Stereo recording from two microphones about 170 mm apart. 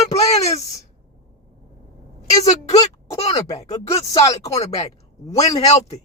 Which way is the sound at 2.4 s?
40° left (ahead or behind).